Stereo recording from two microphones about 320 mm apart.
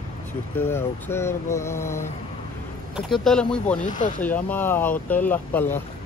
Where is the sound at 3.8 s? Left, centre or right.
Left.